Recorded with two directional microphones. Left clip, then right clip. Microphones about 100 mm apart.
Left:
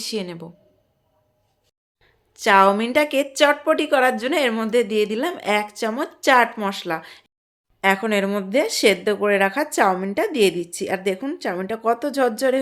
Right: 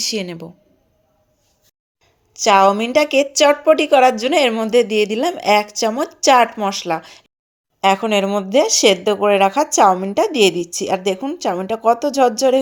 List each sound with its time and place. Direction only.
0.0 s a woman's voice: 40° right (ahead or behind)
2.3 s a woman's voice: 15° right (ahead or behind)
10.2 s speech: 30° right (ahead or behind)